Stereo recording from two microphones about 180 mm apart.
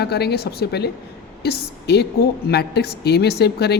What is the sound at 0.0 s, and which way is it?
A woman's voice, 65° left (ahead or behind).